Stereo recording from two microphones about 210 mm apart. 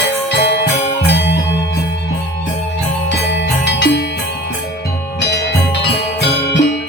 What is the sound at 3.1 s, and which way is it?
Jingle bell, 55° left (ahead or behind).